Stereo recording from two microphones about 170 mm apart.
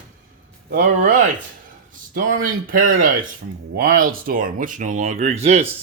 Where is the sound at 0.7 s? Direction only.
55° right (ahead or behind).